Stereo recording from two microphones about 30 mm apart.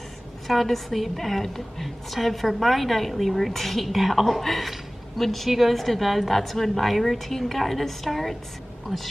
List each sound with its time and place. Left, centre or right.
0.5 s a woman's voice: centre
4.6 s a sound: centre
5.5 s a woman's voice: centre